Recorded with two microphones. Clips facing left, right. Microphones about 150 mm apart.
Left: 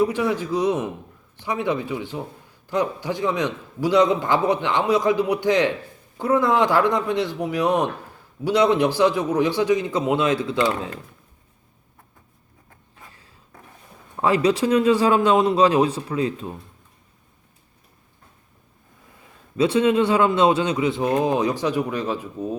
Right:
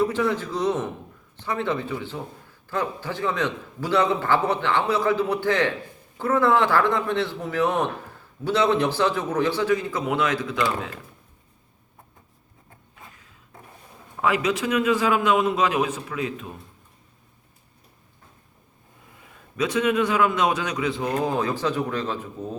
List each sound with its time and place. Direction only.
0.0 s a man's voice: 15° left (ahead or behind); by 10.8 s 30° left (ahead or behind)
14.2 s a man's voice: 35° left (ahead or behind)
19.5 s speech: 30° left (ahead or behind); by 22.4 s 10° left (ahead or behind)